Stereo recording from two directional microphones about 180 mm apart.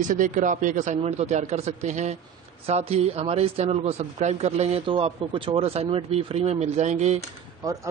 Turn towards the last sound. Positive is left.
turn(degrees=-20)  # may be behind; listen again after turning